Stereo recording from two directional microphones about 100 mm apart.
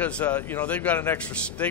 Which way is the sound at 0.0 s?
15° left (ahead or behind).